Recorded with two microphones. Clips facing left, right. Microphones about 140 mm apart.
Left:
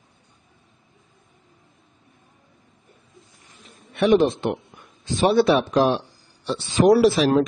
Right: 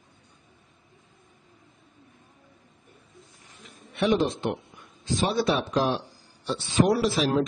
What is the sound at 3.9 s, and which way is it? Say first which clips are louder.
Speech: left 6 dB; 60° left (ahead or behind).